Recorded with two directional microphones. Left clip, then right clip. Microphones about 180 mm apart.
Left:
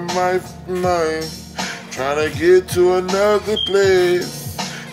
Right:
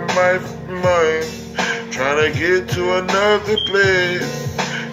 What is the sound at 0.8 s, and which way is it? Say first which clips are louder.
Music: right 4 dB; 45° left (ahead or behind).